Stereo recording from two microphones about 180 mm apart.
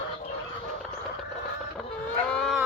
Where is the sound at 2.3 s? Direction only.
5° left (ahead or behind).